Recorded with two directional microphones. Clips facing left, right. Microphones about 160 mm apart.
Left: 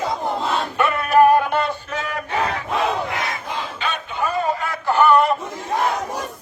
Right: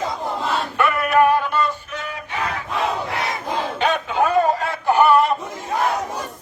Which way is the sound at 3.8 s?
90° right.